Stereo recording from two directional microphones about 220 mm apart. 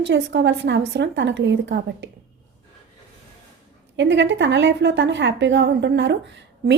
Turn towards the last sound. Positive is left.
turn(degrees=-55)  # may be behind; listen again after turning